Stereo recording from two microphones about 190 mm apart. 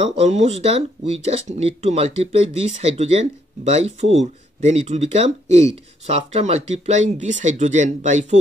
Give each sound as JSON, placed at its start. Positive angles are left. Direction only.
{"t": 0.0, "sound": "speech", "side_deg": -35}